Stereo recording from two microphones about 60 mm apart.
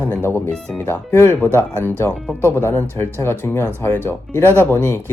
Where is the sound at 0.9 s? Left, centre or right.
Left.